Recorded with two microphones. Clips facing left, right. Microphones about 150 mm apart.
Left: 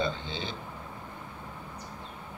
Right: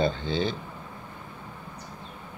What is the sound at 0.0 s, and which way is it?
Speech, 40° right (ahead or behind).